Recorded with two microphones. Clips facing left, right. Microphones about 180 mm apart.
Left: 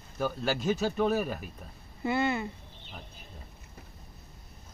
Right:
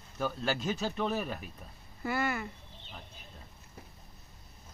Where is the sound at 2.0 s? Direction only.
25° left (ahead or behind).